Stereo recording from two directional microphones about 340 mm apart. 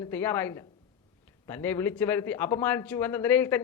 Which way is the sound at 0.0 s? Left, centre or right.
Centre.